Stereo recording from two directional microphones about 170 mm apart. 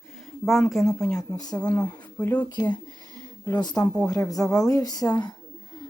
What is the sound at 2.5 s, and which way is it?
Speech, 25° left (ahead or behind).